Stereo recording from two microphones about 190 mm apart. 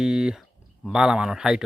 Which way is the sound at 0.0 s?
5° right (ahead or behind).